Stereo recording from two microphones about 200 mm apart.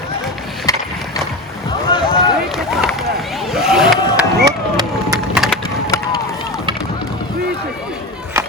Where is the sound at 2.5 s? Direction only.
Centre (ahead or behind).